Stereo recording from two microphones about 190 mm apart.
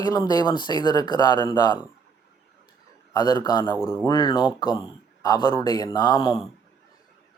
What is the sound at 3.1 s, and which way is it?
Speech, 20° left (ahead or behind).